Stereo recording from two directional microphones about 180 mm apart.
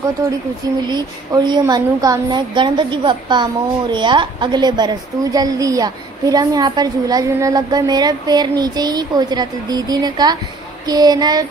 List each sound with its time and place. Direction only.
0.2 s a woman's voice: 15° right (ahead or behind)